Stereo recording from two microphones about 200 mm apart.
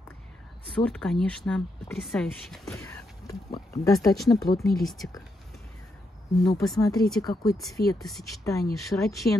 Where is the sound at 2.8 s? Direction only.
15° left (ahead or behind).